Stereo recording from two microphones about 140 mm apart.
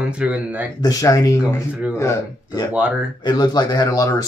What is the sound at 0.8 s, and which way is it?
Speech, 25° left (ahead or behind).